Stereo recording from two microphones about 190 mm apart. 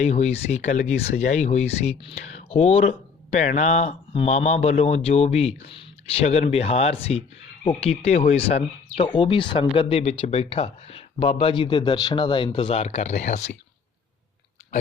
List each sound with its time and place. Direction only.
0.0 s speech: 35° left (ahead or behind)